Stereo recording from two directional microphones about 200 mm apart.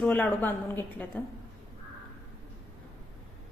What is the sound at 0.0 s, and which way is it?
Speech, 5° left (ahead or behind).